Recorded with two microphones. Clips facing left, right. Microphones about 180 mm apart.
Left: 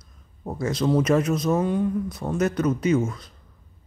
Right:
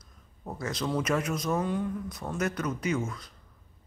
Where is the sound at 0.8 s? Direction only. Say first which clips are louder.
Left 8 dB; 30° left (ahead or behind).